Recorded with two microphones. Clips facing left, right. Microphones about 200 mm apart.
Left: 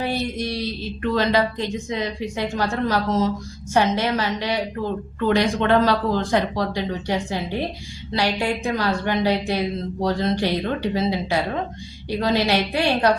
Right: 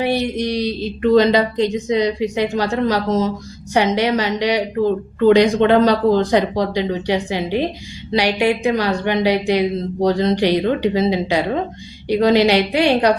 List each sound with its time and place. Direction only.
0.0 s a woman's voice: 15° right (ahead or behind)